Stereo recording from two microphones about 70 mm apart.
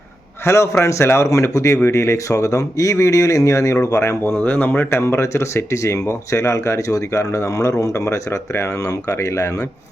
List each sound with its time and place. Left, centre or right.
0.4 s speech: left
4.2 s speech: left
8.8 s speech: left